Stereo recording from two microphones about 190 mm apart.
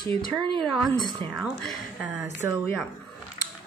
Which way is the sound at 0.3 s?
Centre (ahead or behind).